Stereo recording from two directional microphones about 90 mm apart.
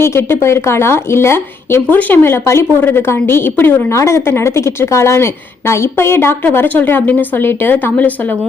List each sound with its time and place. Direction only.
0.0 s a woman's voice: 30° left (ahead or behind)